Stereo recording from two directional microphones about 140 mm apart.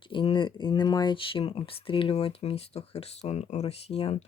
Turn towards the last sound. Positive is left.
turn(degrees=45)  # may be behind; listen again after turning